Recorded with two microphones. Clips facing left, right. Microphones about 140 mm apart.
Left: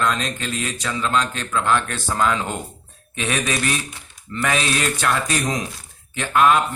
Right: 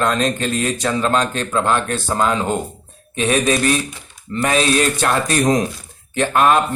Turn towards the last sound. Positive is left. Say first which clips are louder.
# right 2 dB
turn(degrees=-35)  # may be behind; listen again after turning